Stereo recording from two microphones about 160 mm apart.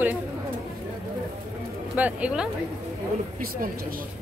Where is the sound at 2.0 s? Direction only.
10° right (ahead or behind).